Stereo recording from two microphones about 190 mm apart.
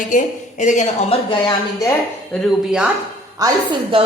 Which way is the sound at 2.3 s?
5° right (ahead or behind).